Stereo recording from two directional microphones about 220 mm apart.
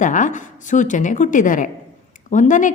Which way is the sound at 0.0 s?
35° left (ahead or behind).